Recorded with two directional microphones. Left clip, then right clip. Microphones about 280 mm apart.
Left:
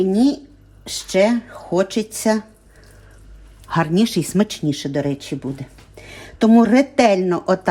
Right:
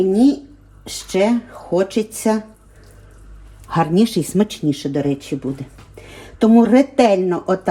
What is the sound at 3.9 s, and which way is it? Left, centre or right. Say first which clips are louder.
Speech: right 2 dB; centre.